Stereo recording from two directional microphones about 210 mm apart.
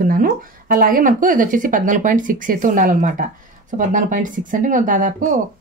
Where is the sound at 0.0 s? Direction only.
40° right (ahead or behind).